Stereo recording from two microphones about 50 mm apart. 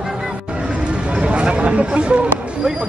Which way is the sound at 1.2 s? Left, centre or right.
Right.